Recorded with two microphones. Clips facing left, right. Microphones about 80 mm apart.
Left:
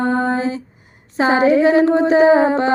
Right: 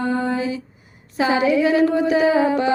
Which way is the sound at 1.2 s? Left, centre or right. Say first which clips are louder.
Left 4 dB; left.